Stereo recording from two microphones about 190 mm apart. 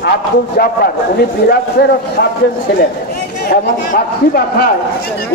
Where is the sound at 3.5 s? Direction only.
50° left (ahead or behind).